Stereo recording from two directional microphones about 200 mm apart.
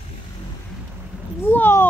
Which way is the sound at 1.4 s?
10° left (ahead or behind).